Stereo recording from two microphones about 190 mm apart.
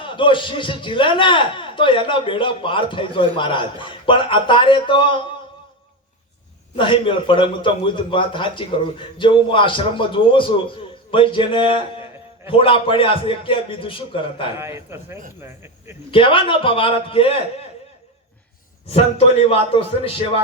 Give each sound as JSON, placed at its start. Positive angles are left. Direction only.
{"t": 0.0, "sound": "a man's voice", "side_deg": 25}
{"t": 6.7, "sound": "a man's voice", "side_deg": 25}
{"t": 14.6, "sound": "a man's voice", "side_deg": -10}
{"t": 16.1, "sound": "a man's voice", "side_deg": 25}
{"t": 18.9, "sound": "a man's voice", "side_deg": 35}